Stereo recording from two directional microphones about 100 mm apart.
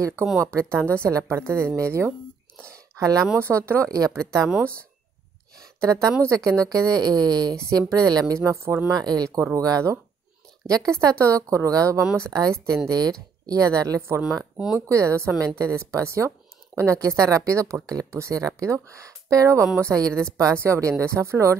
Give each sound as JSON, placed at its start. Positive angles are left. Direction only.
{"t": 0.0, "sound": "a woman's voice", "side_deg": -30}
{"t": 3.4, "sound": "a woman's voice", "side_deg": -25}
{"t": 5.8, "sound": "a woman's voice", "side_deg": -30}
{"t": 8.9, "sound": "a woman's voice", "side_deg": -40}
{"t": 14.4, "sound": "speech", "side_deg": -5}
{"t": 14.9, "sound": "a woman's voice", "side_deg": -30}